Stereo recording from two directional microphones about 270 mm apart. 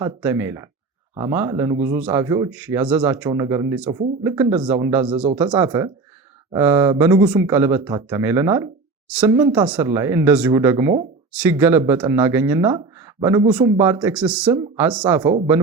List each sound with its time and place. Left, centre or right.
0.0 s speech: centre
9.3 s speech: centre